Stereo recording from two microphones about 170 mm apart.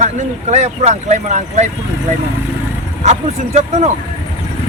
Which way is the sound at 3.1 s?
40° right (ahead or behind).